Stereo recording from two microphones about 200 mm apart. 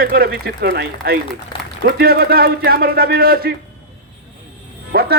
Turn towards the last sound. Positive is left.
turn(degrees=-55)  # may be behind; listen again after turning